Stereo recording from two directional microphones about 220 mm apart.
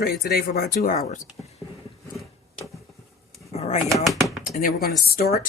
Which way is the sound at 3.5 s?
30° left (ahead or behind).